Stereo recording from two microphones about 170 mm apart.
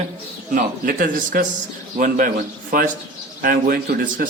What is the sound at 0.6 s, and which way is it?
A man's voice, 55° right (ahead or behind).